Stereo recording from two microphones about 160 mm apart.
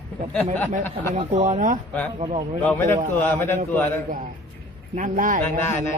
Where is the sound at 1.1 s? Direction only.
45° right (ahead or behind).